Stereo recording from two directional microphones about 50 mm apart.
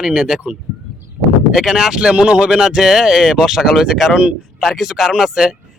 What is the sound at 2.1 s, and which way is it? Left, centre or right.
Speech, right.